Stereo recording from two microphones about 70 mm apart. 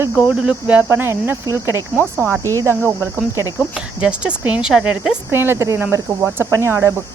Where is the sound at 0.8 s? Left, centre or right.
Right.